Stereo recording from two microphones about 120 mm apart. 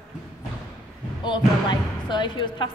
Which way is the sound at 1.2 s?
40° left (ahead or behind).